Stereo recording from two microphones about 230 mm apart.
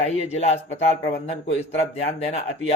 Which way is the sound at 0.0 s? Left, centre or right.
Left.